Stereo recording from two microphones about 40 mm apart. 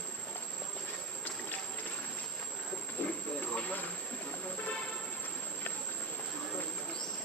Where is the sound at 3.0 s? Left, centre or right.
Left.